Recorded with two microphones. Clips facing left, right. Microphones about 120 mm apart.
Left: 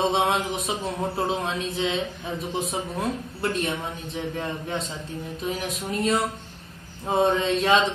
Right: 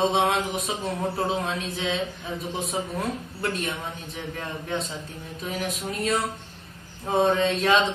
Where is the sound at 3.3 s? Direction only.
Centre (ahead or behind).